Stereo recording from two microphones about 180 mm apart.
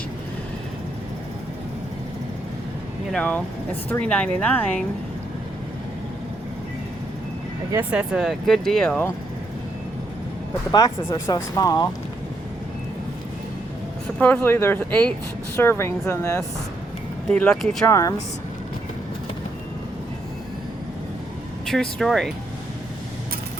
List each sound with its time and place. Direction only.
3.1 s speech: 5° left (ahead or behind)
7.7 s speech: 10° right (ahead or behind)
10.7 s speech: 20° left (ahead or behind)
14.2 s speech: 10° left (ahead or behind)
17.2 s speech: 5° left (ahead or behind)
21.7 s speech: centre (ahead or behind)